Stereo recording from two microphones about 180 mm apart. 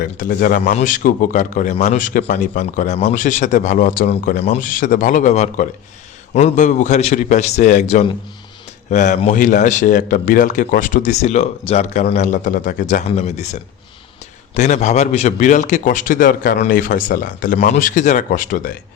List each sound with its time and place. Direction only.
0.0 s a man's voice: 50° left (ahead or behind)